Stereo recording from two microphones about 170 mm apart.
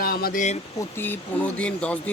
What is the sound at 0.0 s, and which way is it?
Speech, 60° left (ahead or behind).